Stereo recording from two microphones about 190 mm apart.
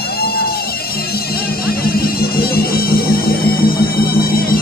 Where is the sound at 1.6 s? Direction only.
50° left (ahead or behind).